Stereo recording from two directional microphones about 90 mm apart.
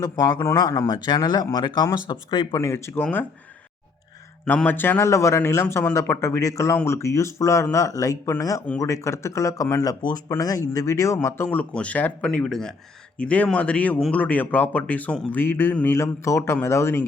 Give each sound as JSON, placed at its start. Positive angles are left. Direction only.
{"t": 0.5, "sound": "speech", "side_deg": 45}
{"t": 2.0, "sound": "speech", "side_deg": 60}
{"t": 2.6, "sound": "speech", "side_deg": 30}
{"t": 3.0, "sound": "speech", "side_deg": 20}
{"t": 4.4, "sound": "speech", "side_deg": 20}
{"t": 11.5, "sound": "speech", "side_deg": 15}